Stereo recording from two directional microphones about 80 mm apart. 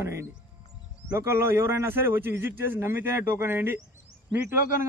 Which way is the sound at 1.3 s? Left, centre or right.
Right.